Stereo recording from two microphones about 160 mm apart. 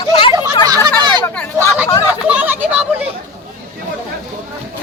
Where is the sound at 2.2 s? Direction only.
10° right (ahead or behind).